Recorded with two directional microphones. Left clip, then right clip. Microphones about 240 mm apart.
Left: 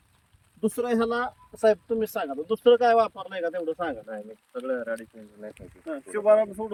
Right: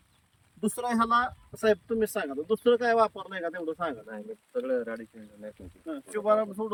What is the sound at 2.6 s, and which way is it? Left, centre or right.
Speech, centre.